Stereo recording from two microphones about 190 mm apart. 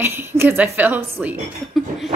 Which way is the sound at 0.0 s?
10° right (ahead or behind).